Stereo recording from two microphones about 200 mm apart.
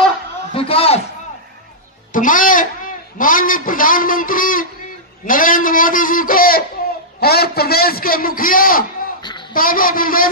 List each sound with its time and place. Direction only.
0.5 s a man's voice: 30° left (ahead or behind)
2.1 s a man's voice: 40° left (ahead or behind)
9.2 s a sound: 20° left (ahead or behind)
9.5 s a man's voice: 45° left (ahead or behind)